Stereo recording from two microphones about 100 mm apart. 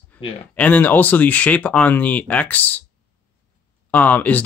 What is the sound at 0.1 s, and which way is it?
Speech, 15° left (ahead or behind).